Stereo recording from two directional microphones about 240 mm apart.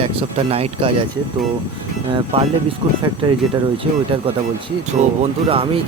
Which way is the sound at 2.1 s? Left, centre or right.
Right.